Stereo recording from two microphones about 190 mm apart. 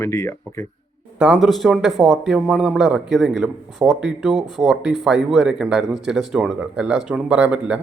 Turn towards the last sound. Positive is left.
turn(degrees=-5)  # may be behind; listen again after turning